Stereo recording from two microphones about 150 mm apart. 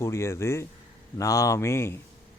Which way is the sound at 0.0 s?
20° left (ahead or behind).